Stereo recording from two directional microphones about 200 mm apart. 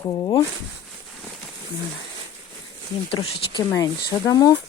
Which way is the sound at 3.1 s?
30° left (ahead or behind).